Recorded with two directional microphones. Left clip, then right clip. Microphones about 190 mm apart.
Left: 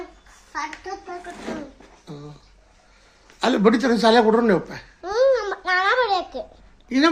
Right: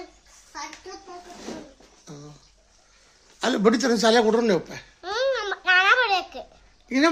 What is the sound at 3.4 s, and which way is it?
Speech, 10° right (ahead or behind).